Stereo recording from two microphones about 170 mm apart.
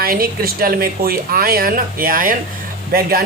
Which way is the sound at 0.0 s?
60° right (ahead or behind).